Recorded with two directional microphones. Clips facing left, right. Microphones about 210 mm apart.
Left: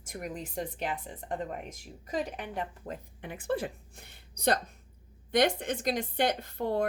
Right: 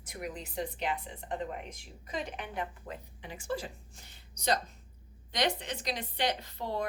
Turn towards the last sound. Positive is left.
turn(degrees=55)  # may be behind; listen again after turning